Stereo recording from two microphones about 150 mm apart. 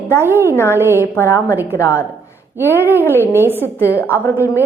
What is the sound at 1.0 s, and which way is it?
A woman's voice, 15° left (ahead or behind).